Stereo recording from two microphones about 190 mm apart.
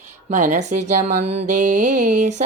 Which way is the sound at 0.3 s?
40° right (ahead or behind).